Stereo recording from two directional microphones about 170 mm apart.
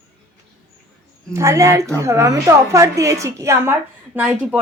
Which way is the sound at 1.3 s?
15° right (ahead or behind).